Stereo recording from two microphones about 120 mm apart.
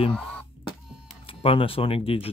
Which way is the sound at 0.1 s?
10° left (ahead or behind).